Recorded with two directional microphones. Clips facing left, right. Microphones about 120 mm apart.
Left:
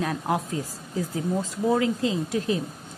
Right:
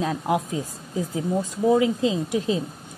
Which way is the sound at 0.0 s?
20° right (ahead or behind).